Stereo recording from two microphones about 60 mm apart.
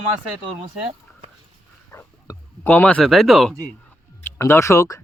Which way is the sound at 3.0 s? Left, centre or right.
Centre.